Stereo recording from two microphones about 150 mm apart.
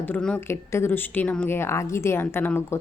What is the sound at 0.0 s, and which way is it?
A woman's voice, 10° left (ahead or behind).